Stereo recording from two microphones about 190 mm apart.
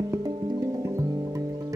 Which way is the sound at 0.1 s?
20° right (ahead or behind).